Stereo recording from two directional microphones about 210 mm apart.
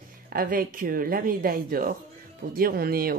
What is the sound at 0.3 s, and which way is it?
Speech, 40° right (ahead or behind).